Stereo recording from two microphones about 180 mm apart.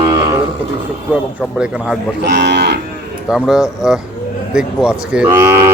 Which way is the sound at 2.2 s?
70° right (ahead or behind).